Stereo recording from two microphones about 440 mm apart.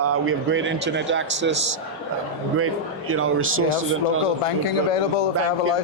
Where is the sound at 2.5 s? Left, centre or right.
Right.